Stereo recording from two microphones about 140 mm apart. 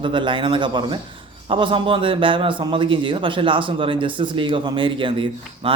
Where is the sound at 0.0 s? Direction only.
35° right (ahead or behind).